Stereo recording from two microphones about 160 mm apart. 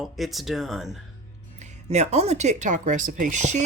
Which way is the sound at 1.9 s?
45° right (ahead or behind).